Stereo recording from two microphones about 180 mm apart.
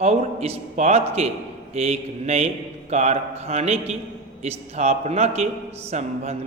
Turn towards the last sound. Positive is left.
turn(degrees=-40)  # may be behind; listen again after turning